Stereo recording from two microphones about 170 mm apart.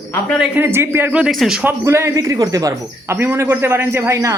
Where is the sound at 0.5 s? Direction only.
10° right (ahead or behind).